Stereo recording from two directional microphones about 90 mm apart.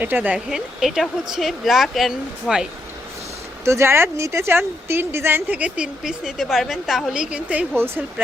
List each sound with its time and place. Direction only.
0.0 s speech: 20° right (ahead or behind)
0.3 s speech: 5° right (ahead or behind)
3.6 s speech: 30° right (ahead or behind); by 7.7 s 10° right (ahead or behind)